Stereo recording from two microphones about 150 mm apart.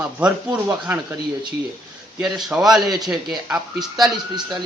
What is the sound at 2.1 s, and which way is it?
A man's voice, 5° right (ahead or behind).